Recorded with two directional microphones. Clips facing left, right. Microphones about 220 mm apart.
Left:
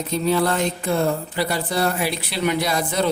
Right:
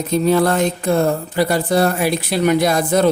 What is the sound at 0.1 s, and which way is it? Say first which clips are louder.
Speech: right 5 dB; 50° right (ahead or behind).